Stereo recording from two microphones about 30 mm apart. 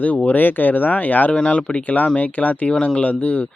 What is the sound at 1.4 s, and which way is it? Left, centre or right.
Speech, left.